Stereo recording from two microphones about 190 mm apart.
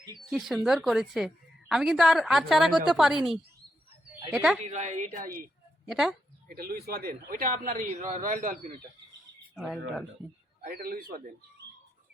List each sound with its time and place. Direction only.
0.3 s a woman's voice: centre (ahead or behind)
4.3 s a woman's voice: centre (ahead or behind)
4.6 s a woman's voice: 40° right (ahead or behind)
5.8 s speech: centre (ahead or behind)
6.5 s a man's voice: 50° right (ahead or behind)
10.6 s a man's voice: 50° right (ahead or behind)